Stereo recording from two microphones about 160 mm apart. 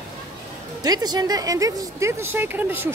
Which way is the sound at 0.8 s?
25° right (ahead or behind).